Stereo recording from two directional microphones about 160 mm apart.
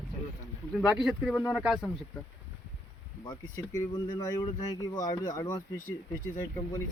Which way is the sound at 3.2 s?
20° left (ahead or behind).